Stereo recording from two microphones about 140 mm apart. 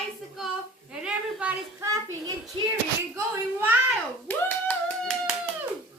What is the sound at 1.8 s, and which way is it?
A child's voice, 25° right (ahead or behind).